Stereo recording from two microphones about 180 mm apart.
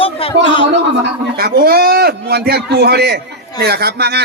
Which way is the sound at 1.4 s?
55° right (ahead or behind).